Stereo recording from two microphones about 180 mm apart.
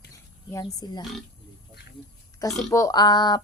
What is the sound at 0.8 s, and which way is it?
Speech, 25° left (ahead or behind).